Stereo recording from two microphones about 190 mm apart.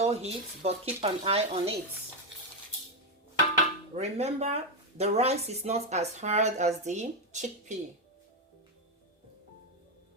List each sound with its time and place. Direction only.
0.0 s speech: 35° right (ahead or behind)
3.9 s speech: 35° right (ahead or behind)